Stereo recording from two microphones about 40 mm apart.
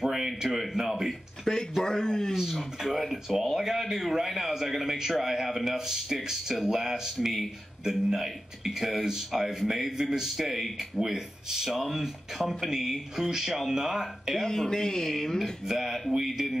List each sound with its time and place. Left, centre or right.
0.0 s a sound: centre
0.4 s a man's voice: centre
1.4 s a sound: centre
1.8 s speech: centre
3.0 s a man's voice: centre
13.7 s a man's voice: centre
14.4 s speech: centre
15.6 s a man's voice: centre